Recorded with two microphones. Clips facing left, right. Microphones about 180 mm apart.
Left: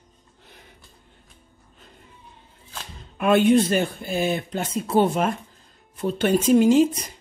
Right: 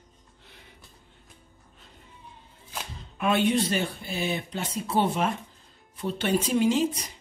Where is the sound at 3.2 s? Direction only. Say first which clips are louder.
Left 7 dB; 50° left (ahead or behind).